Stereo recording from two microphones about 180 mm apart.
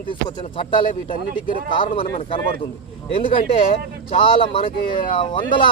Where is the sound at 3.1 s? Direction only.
30° left (ahead or behind).